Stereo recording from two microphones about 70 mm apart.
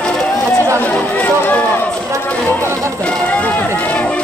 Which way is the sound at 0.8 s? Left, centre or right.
Left.